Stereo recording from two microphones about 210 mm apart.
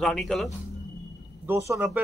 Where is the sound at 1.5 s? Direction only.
15° right (ahead or behind).